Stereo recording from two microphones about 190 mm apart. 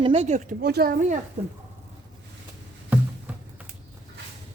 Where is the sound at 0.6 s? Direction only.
55° right (ahead or behind).